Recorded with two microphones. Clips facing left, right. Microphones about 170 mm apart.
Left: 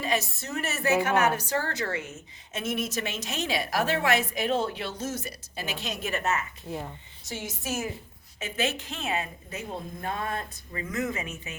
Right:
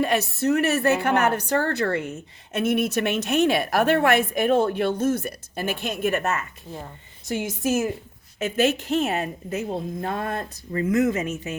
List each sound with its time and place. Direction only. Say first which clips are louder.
0.0 s a woman's voice: right 8 dB; 60° right (ahead or behind)
6.7 s speech: left 3 dB; 5° left (ahead or behind)
7.3 s speech: right 10 dB; 50° right (ahead or behind)